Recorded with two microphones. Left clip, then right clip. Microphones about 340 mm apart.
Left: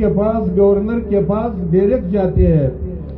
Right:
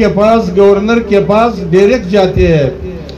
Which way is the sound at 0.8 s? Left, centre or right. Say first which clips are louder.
Right 8 dB; right.